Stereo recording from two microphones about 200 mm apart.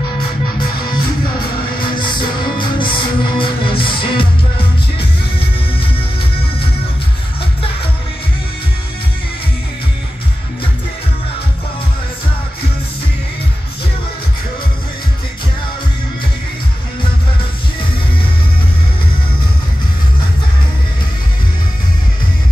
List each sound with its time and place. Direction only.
1.8 s music: 25° left (ahead or behind)